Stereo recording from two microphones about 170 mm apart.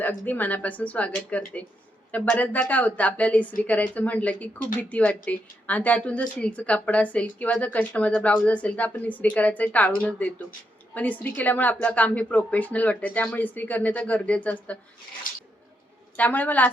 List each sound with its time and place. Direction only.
0.0 s speech: 10° left (ahead or behind)
15.3 s a sound: 55° left (ahead or behind)
16.1 s speech: 10° left (ahead or behind)